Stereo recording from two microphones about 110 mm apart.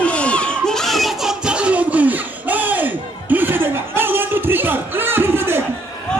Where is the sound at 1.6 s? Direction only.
10° right (ahead or behind).